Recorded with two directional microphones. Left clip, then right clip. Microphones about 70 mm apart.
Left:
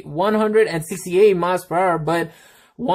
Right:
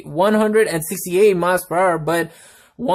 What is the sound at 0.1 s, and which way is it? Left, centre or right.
Speech, centre.